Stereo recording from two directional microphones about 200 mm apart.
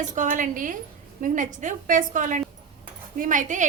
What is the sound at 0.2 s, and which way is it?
Speech, 40° right (ahead or behind).